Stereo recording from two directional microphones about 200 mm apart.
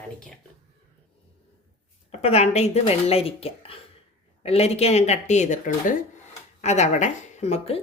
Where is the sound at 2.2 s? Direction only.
30° left (ahead or behind).